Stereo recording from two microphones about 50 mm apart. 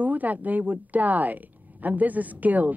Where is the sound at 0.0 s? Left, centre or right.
Right.